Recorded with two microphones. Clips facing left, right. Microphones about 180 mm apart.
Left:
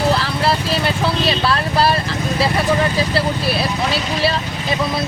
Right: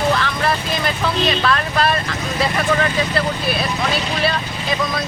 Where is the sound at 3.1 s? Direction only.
30° left (ahead or behind).